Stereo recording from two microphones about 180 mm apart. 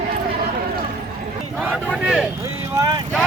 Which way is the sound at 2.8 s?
20° right (ahead or behind).